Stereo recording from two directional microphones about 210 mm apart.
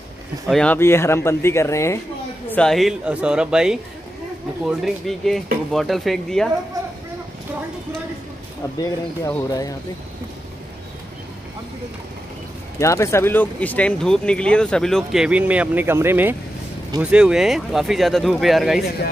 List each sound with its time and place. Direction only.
0.5 s speech: 5° left (ahead or behind)
2.5 s speech: centre (ahead or behind)
8.7 s speech: 15° left (ahead or behind)
12.7 s speech: 15° left (ahead or behind)